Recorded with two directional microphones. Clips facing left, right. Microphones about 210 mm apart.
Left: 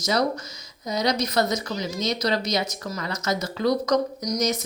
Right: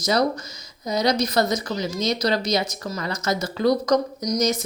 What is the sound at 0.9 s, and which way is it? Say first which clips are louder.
Speech: right 3 dB; 30° right (ahead or behind).